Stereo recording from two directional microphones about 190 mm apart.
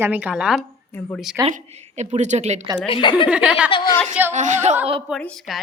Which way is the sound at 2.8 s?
25° left (ahead or behind).